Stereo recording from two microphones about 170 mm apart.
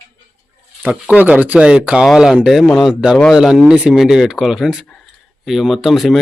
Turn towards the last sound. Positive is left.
turn(degrees=0)  # may be behind; listen again after turning